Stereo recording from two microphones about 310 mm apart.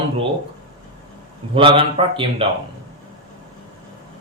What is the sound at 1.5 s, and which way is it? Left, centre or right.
Speech, centre.